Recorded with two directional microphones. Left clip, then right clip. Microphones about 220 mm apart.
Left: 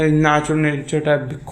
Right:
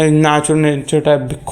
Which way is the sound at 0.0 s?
30° right (ahead or behind).